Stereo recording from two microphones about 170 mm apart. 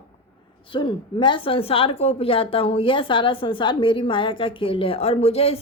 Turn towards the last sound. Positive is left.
turn(degrees=35)  # may be behind; listen again after turning